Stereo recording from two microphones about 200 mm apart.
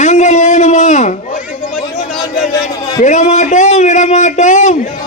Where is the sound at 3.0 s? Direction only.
35° left (ahead or behind).